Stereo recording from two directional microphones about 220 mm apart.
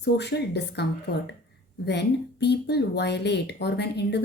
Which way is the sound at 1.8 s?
50° left (ahead or behind).